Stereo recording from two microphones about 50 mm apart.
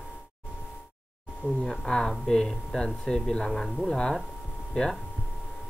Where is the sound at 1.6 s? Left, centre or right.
Centre.